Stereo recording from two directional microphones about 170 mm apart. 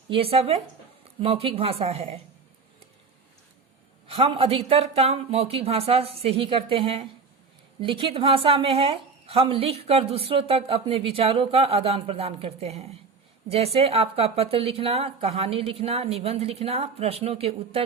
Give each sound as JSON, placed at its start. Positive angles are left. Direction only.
{"t": 0.1, "sound": "a woman's voice", "side_deg": -35}
{"t": 4.0, "sound": "a woman's voice", "side_deg": -35}